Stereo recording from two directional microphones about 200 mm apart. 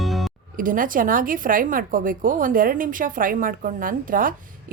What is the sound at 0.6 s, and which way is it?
A woman's voice, 40° right (ahead or behind).